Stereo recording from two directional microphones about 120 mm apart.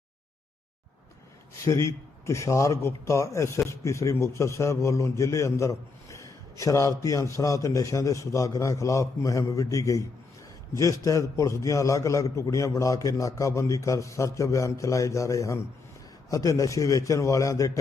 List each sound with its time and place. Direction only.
1.6 s speech: 25° left (ahead or behind)